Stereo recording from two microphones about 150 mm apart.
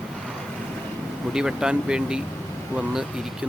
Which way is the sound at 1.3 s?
5° right (ahead or behind).